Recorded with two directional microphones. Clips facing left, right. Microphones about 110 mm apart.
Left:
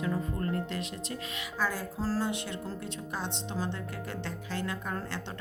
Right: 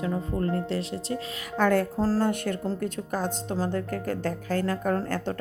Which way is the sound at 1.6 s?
60° right (ahead or behind).